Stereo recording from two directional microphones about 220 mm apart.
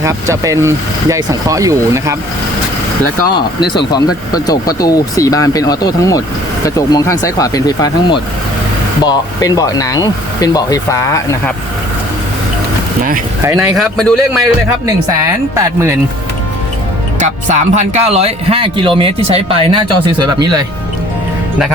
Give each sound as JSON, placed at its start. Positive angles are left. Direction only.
{"t": 0.0, "sound": "speech", "side_deg": -15}
{"t": 3.8, "sound": "speech", "side_deg": 20}
{"t": 13.4, "sound": "speech", "side_deg": -10}
{"t": 13.7, "sound": "a man's voice", "side_deg": 0}
{"t": 14.8, "sound": "speech", "side_deg": -15}
{"t": 17.2, "sound": "speech", "side_deg": -35}